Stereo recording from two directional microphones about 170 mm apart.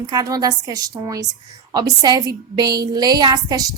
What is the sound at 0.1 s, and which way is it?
A woman's voice, 20° right (ahead or behind).